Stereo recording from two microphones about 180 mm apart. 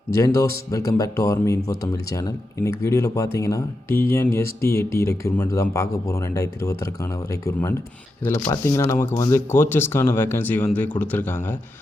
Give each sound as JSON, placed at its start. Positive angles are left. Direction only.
{"t": 0.3, "sound": "speech", "side_deg": 20}